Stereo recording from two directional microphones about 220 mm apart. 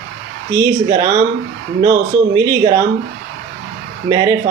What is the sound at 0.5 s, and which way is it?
Speech, 15° right (ahead or behind).